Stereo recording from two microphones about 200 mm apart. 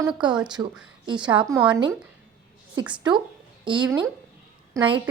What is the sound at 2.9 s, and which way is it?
Speech, 20° right (ahead or behind).